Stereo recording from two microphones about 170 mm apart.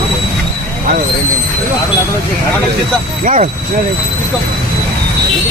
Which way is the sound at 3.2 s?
50° right (ahead or behind).